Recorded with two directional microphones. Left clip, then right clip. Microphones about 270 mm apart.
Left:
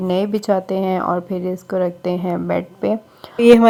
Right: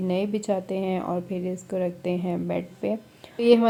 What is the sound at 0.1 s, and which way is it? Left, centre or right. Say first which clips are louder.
Speech: left 9 dB; centre.